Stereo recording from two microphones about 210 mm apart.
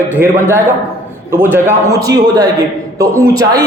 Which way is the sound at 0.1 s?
10° right (ahead or behind).